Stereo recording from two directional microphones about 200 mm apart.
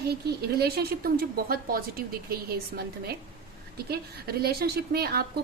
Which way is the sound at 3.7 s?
50° right (ahead or behind).